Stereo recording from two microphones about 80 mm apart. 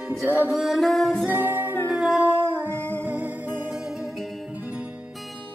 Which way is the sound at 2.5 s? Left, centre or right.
Left.